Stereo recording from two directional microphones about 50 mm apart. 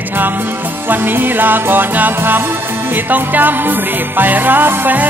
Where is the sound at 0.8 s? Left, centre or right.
Right.